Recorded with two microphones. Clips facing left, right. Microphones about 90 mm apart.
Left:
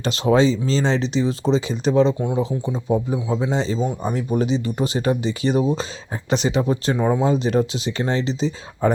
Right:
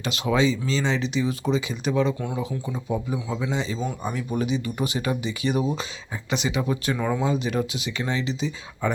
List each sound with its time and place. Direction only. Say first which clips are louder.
0.0 s speech: left 5 dB; 35° left (ahead or behind)